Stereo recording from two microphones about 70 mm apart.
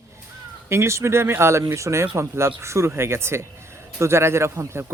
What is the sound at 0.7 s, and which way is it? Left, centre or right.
Speech, right.